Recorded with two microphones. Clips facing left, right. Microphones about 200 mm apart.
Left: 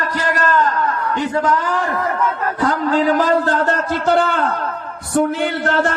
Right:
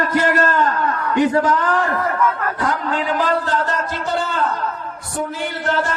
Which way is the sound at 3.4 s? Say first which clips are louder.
Left 4 dB; 60° left (ahead or behind).